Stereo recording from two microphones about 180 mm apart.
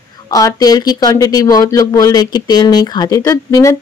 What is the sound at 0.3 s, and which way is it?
Speech, 20° left (ahead or behind).